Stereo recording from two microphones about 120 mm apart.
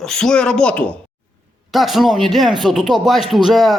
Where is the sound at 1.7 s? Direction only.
Centre (ahead or behind).